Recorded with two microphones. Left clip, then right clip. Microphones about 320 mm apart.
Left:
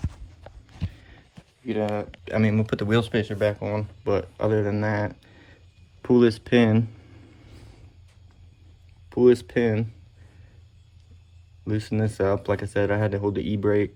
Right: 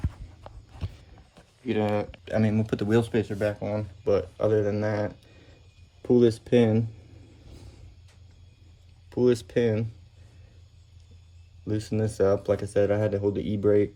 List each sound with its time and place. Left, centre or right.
1.6 s speech: centre
2.2 s speech: left
9.0 s speech: left
11.7 s speech: left